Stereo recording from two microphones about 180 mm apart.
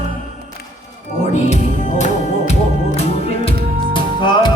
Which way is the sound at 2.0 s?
40° left (ahead or behind).